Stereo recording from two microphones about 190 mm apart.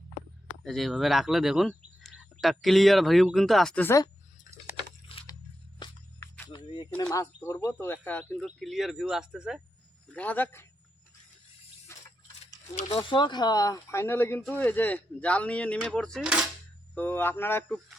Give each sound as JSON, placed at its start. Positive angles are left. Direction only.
{"t": 0.6, "sound": "speech", "side_deg": 0}
{"t": 5.0, "sound": "a sound", "side_deg": 30}
{"t": 5.8, "sound": "music", "side_deg": 15}
{"t": 7.4, "sound": "speech", "side_deg": 15}
{"t": 10.1, "sound": "speech", "side_deg": 5}
{"t": 13.0, "sound": "speech", "side_deg": 25}
{"t": 16.9, "sound": "speech", "side_deg": 10}